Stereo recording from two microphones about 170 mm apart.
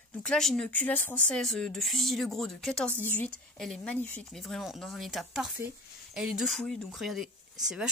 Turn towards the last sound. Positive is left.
turn(degrees=-5)  # may be behind; listen again after turning